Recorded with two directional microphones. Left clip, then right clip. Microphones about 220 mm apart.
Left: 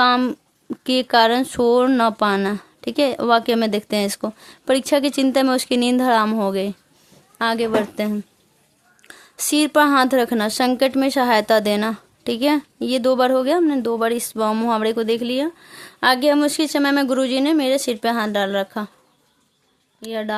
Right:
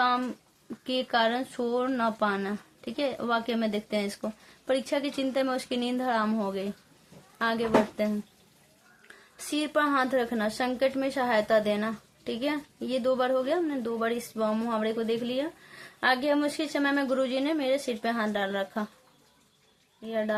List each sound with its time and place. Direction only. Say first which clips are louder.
0.0 s a sound: left 10 dB; 50° left (ahead or behind)
0.9 s a woman's voice: left 11 dB; 50° left (ahead or behind)
20.0 s a woman's voice: left 4 dB; 45° left (ahead or behind)